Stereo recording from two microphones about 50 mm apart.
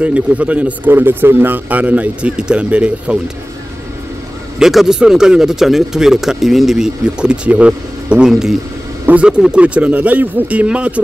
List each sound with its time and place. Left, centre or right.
0.0 s speech: right
0.8 s speech: right
2.3 s speech: centre
4.6 s speech: centre
7.2 s speech: right
8.3 s speech: centre; by 11.0 s right